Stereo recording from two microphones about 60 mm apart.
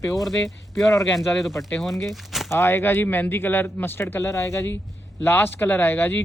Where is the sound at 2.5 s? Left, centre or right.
Left.